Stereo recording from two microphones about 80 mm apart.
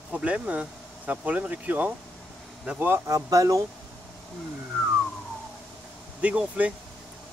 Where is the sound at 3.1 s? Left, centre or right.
Right.